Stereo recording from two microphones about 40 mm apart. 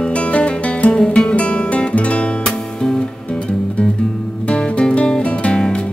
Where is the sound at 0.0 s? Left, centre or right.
Left.